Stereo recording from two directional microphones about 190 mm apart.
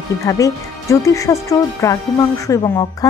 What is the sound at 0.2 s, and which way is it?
A woman's voice, 15° left (ahead or behind).